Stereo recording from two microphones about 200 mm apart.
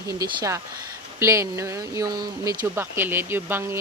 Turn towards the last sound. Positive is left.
turn(degrees=-10)  # may be behind; listen again after turning